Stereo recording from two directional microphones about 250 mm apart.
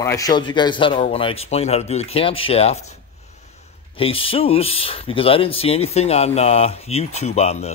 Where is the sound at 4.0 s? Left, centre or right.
Left.